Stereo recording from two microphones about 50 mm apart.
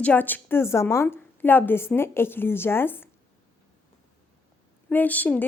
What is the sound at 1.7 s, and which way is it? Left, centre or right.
A woman's voice, left.